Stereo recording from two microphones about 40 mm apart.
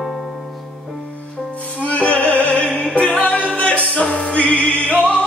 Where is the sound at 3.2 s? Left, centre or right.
Left.